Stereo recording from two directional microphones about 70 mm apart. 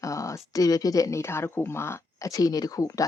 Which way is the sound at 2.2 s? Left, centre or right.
Left.